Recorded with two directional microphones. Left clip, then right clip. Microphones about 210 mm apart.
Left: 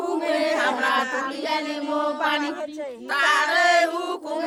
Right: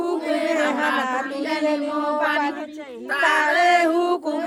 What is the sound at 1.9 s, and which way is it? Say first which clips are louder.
Speech: even; centre (ahead or behind).